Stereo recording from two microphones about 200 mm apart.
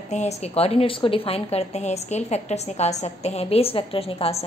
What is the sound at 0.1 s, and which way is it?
A woman's voice, 35° left (ahead or behind).